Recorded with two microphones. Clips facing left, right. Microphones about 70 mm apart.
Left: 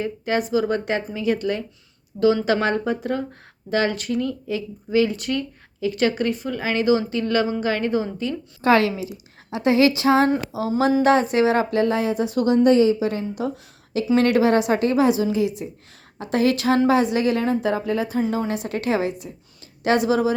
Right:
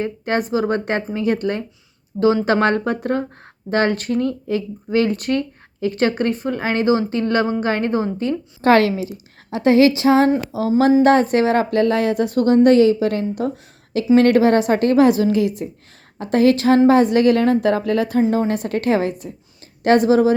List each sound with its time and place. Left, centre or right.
0.0 s a woman's voice: right
8.6 s a woman's voice: right
9.5 s a woman's voice: right
12.6 s a woman's voice: right
14.2 s speech: right
16.2 s a woman's voice: right
18.2 s speech: right